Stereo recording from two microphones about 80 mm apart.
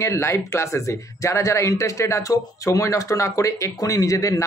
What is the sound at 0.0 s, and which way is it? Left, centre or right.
Speech, left.